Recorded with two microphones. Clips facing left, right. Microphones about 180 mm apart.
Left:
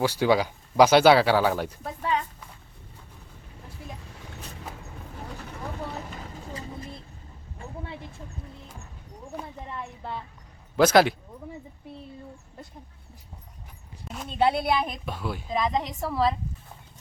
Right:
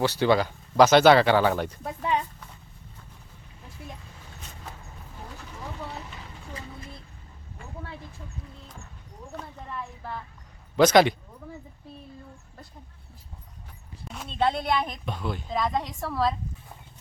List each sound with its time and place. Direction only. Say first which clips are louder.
0.0 s speech: even; 10° left (ahead or behind)
1.8 s a sound: right 1 dB; 15° right (ahead or behind)
6.5 s vehicle: left 2 dB; 30° left (ahead or behind)
9.3 s a sound: left 1 dB; 15° left (ahead or behind)
10.8 s a woman's voice: right 1 dB; 5° left (ahead or behind)
14.3 s a woman's voice: left 2 dB; 10° left (ahead or behind)